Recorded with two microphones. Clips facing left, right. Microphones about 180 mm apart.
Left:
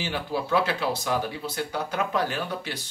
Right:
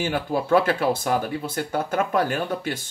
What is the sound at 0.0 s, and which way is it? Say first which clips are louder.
Speech: right 5 dB; 50° right (ahead or behind).